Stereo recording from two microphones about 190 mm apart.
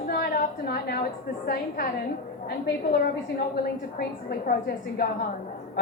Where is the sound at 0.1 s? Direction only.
55° left (ahead or behind).